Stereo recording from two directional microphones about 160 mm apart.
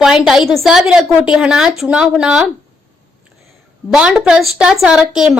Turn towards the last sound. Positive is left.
turn(degrees=-5)  # may be behind; listen again after turning